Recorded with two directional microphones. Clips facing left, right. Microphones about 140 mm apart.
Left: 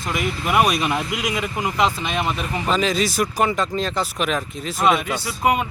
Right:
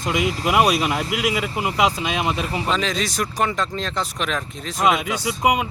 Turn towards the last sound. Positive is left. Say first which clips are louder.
# even
turn(degrees=-15)  # may be behind; listen again after turning